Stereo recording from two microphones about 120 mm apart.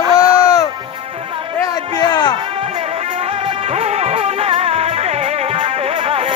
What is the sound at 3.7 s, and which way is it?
Music, 60° right (ahead or behind).